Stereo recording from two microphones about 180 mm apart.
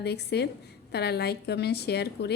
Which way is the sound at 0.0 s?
65° left (ahead or behind).